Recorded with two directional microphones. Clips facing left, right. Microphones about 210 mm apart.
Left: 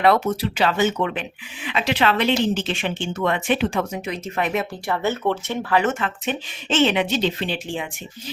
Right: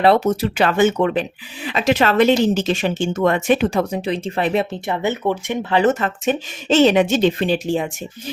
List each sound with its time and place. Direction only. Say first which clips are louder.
0.0 s speech: right 3 dB; 30° right (ahead or behind)
0.4 s speech: right 4 dB; 50° right (ahead or behind); by 4.8 s 30° right (ahead or behind)
4.9 s speech: left 1 dB; 15° right (ahead or behind)
5.7 s speech: right 5 dB; 35° right (ahead or behind)